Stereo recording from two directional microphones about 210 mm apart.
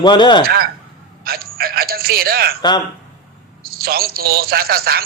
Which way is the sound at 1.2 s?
45° right (ahead or behind).